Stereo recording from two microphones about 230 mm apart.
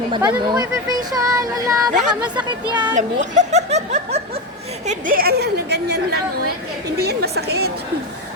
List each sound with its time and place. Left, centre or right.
0.1 s speech: centre
2.9 s a woman's voice: right